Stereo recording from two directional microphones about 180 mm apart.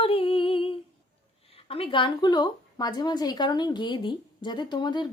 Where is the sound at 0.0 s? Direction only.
30° left (ahead or behind).